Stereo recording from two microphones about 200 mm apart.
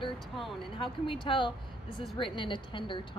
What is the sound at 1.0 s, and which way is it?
Speech, 25° left (ahead or behind).